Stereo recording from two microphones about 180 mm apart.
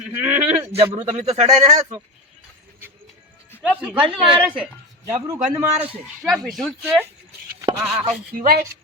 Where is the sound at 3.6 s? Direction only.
5° right (ahead or behind).